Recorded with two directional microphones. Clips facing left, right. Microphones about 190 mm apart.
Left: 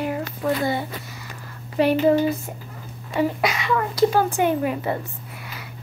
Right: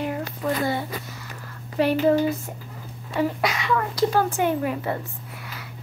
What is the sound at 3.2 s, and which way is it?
A woman's voice, 10° left (ahead or behind).